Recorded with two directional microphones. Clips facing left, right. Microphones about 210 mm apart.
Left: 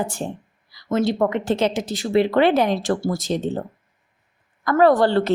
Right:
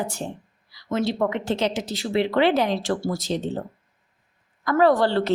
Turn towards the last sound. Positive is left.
turn(degrees=50)  # may be behind; listen again after turning